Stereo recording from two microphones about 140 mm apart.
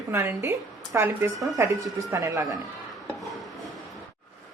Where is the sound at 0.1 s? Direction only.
20° right (ahead or behind).